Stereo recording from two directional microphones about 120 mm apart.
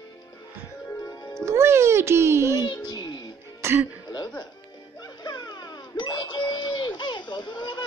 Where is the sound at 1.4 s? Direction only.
20° right (ahead or behind).